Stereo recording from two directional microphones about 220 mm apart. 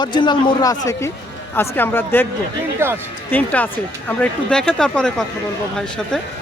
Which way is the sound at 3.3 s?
5° left (ahead or behind).